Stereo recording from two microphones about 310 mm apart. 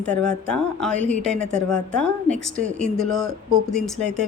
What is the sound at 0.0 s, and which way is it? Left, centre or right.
A woman's voice, centre.